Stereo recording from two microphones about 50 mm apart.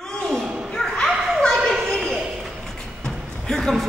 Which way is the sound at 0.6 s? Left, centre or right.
Centre.